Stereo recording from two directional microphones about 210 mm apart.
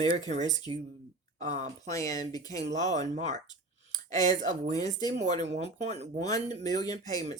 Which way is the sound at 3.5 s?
20° left (ahead or behind).